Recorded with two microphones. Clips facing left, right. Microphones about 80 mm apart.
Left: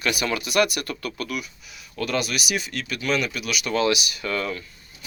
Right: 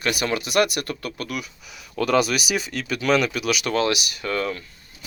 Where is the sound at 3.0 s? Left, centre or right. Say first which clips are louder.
Right 5 dB; right.